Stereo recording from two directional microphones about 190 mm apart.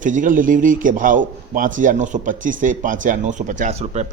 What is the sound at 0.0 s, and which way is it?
A man's voice, 45° right (ahead or behind).